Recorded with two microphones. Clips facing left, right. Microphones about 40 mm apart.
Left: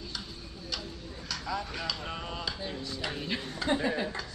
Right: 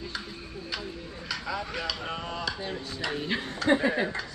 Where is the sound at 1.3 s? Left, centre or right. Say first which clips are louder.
Right 2 dB; centre.